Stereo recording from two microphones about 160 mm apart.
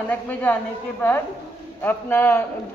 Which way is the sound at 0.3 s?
10° left (ahead or behind).